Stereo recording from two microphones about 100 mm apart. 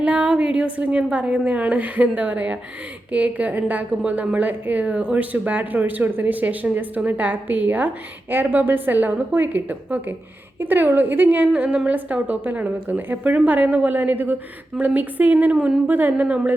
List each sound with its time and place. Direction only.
0.0 s a woman's voice: 10° right (ahead or behind)